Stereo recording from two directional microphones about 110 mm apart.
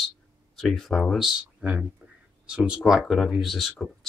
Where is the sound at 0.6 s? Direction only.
5° left (ahead or behind).